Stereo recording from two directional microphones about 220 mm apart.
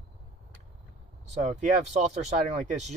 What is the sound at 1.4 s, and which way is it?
Speech, 30° right (ahead or behind).